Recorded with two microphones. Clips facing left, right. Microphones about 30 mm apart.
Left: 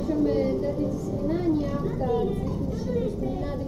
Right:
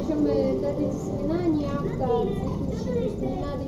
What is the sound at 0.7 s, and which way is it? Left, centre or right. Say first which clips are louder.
Speech: right 1 dB; right.